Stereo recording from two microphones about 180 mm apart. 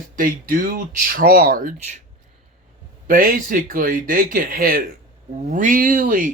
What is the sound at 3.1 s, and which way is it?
Speech, 50° right (ahead or behind).